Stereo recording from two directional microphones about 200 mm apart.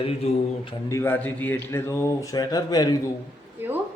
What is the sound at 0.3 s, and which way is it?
Mantra, 30° left (ahead or behind).